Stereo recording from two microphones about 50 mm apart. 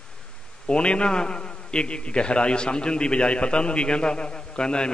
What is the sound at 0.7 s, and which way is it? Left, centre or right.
A man's voice, centre.